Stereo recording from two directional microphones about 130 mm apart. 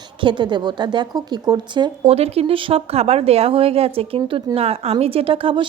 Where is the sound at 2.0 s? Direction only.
50° right (ahead or behind).